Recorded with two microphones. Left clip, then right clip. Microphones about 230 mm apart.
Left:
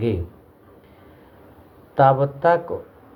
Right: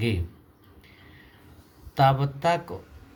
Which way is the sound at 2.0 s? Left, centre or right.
Right.